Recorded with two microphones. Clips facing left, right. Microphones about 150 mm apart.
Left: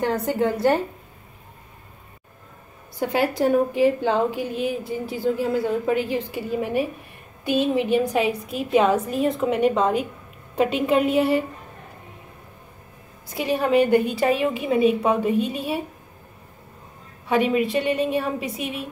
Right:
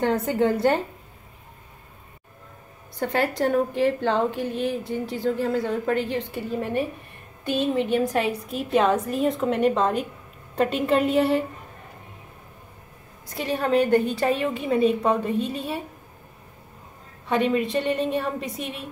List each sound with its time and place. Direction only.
0.0 s a woman's voice: centre (ahead or behind)
3.0 s a woman's voice: 5° left (ahead or behind)
13.3 s a woman's voice: 5° left (ahead or behind)
17.3 s a woman's voice: 5° left (ahead or behind)